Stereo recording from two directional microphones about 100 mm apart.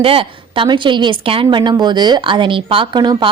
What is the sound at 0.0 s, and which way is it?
Speech, 65° right (ahead or behind).